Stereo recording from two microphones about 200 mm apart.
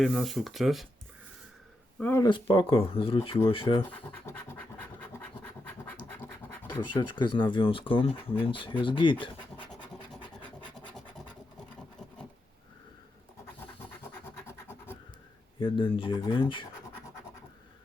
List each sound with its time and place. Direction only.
0.0 s speech: centre (ahead or behind)
2.0 s speech: 10° left (ahead or behind)
2.3 s speech: 25° left (ahead or behind)
4.3 s speech: 10° left (ahead or behind)
5.6 s scratch: 10° left (ahead or behind)
6.7 s a sound: 25° left (ahead or behind)
7.0 s speech: 25° left (ahead or behind)
10.8 s scratch: centre (ahead or behind)
14.4 s scratch: 10° left (ahead or behind)
15.5 s speech: 25° left (ahead or behind)